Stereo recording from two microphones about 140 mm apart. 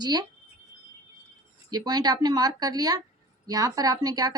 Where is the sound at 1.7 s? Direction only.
30° right (ahead or behind).